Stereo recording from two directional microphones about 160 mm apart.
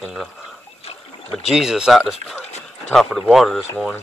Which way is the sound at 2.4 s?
45° left (ahead or behind).